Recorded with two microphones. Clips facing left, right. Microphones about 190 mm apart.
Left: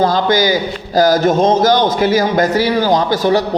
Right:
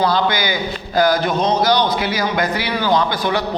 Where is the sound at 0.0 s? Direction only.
45° left (ahead or behind).